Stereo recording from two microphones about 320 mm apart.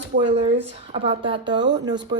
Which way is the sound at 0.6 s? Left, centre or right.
Centre.